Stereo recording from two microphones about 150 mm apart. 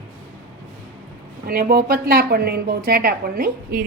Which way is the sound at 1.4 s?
85° right.